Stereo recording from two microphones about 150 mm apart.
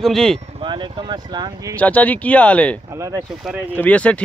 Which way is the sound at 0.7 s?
30° right (ahead or behind).